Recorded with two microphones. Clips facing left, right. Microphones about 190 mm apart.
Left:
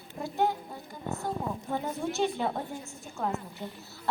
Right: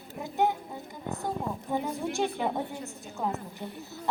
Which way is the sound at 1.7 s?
15° right (ahead or behind).